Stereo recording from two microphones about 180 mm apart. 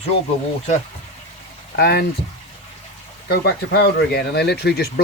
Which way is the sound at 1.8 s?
60° left (ahead or behind).